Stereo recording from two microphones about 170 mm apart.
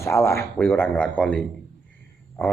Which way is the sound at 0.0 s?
15° left (ahead or behind).